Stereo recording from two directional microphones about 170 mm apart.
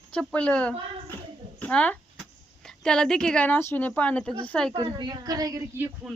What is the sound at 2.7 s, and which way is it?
Speech, 5° left (ahead or behind).